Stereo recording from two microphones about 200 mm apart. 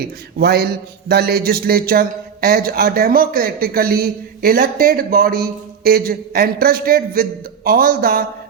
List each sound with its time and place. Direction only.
0.0 s a man's voice: 50° right (ahead or behind)